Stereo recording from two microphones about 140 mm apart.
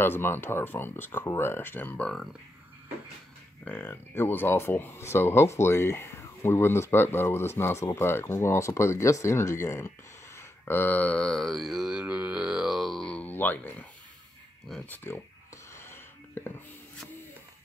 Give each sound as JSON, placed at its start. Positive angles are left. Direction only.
{"t": 0.0, "sound": "speech", "side_deg": 15}
{"t": 3.6, "sound": "speech", "side_deg": 15}
{"t": 14.9, "sound": "speech", "side_deg": 15}
{"t": 15.7, "sound": "a sound", "side_deg": 20}